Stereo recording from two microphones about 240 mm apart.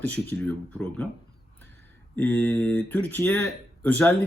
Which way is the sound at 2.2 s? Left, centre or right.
Centre.